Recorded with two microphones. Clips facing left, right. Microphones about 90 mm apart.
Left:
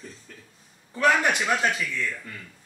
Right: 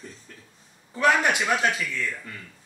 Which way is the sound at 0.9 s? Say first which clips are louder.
Even; 10° right (ahead or behind).